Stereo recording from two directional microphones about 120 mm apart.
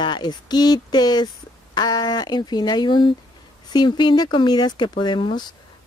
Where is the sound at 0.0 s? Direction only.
40° left (ahead or behind).